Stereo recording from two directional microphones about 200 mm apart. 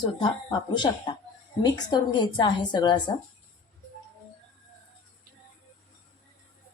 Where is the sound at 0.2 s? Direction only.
25° left (ahead or behind).